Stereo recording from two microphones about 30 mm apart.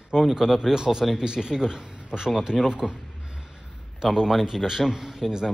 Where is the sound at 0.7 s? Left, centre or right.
Centre.